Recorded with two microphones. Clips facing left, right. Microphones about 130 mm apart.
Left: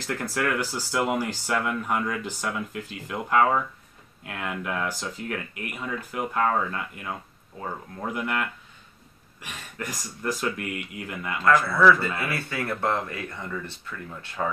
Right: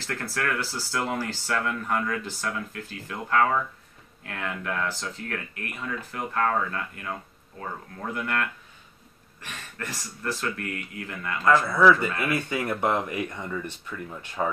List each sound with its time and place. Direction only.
0.0 s speech: 15° left (ahead or behind)
11.4 s speech: 15° right (ahead or behind)